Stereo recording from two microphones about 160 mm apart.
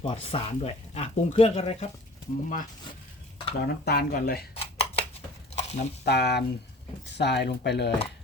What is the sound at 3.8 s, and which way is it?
Speech, 75° left (ahead or behind).